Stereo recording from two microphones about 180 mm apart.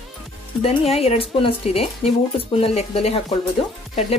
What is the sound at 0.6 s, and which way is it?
Speech, 35° left (ahead or behind).